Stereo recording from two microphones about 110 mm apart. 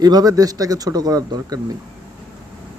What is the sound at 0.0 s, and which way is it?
Speech, 35° right (ahead or behind).